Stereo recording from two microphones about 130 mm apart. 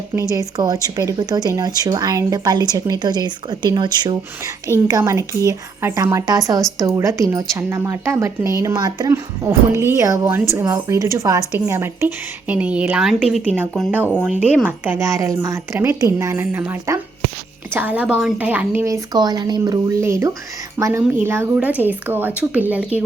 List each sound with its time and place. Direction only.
0.2 s a woman's voice: 25° right (ahead or behind); by 13.6 s 5° right (ahead or behind)
13.9 s a woman's voice: 15° right (ahead or behind)